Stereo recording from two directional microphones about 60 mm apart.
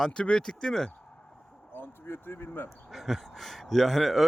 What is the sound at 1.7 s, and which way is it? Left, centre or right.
Speech, left.